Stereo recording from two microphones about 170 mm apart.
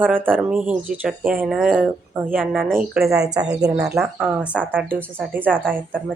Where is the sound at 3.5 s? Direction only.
20° right (ahead or behind).